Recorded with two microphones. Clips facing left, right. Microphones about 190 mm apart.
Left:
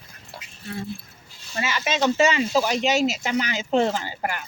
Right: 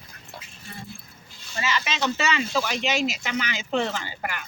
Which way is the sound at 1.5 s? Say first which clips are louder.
Left 3 dB; 50° left (ahead or behind).